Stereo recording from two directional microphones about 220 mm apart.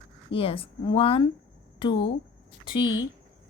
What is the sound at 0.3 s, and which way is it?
Speech, 25° left (ahead or behind).